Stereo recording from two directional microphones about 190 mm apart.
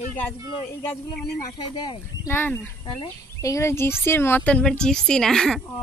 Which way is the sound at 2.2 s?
10° left (ahead or behind).